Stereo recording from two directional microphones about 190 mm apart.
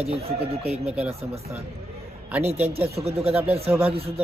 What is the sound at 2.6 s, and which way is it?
Speech, 30° right (ahead or behind).